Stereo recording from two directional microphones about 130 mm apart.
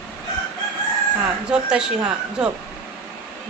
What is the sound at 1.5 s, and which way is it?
Speech, 5° right (ahead or behind).